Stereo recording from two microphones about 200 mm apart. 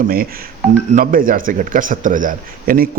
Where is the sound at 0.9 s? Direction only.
45° right (ahead or behind).